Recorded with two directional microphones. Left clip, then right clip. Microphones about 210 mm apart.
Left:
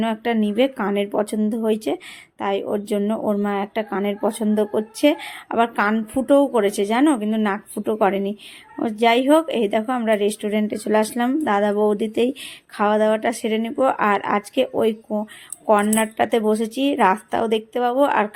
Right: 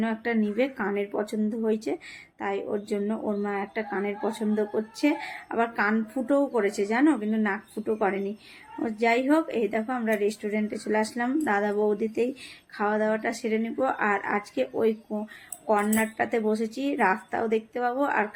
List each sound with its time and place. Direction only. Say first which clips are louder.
0.0 s speech: left 6 dB; 40° left (ahead or behind)